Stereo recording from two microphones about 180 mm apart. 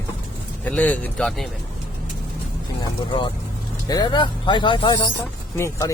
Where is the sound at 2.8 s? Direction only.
25° left (ahead or behind).